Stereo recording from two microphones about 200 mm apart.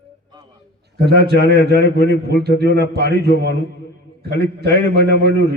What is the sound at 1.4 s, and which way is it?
A man's voice, 60° left (ahead or behind).